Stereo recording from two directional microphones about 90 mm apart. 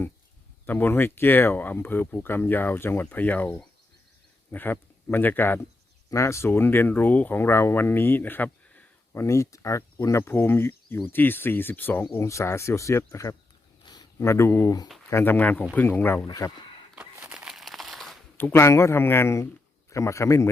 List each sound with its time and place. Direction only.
0.6 s speech: 20° left (ahead or behind)
4.5 s speech: 20° left (ahead or behind)
6.1 s speech: 35° left (ahead or behind); by 8.9 s 15° left (ahead or behind)
9.1 s speech: 35° left (ahead or behind)
12.1 s speech: 30° left (ahead or behind)
13.8 s a sound: 50° left (ahead or behind)
14.2 s speech: 30° left (ahead or behind)
16.2 s speech: 40° left (ahead or behind)
16.9 s a sound: 20° right (ahead or behind)
17.3 s crumpling: 5° right (ahead or behind)
18.3 s speech: 25° left (ahead or behind)